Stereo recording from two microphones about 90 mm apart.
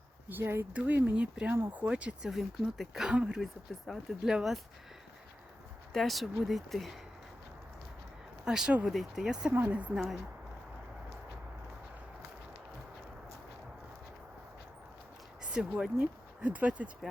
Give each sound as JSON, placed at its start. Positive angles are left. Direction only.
{"t": 0.3, "sound": "speech", "side_deg": -25}
{"t": 2.3, "sound": "speech", "side_deg": 0}
{"t": 5.9, "sound": "speech", "side_deg": 0}
{"t": 8.4, "sound": "speech", "side_deg": -10}
{"t": 9.5, "sound": "speech", "side_deg": -20}
{"t": 15.5, "sound": "speech", "side_deg": -10}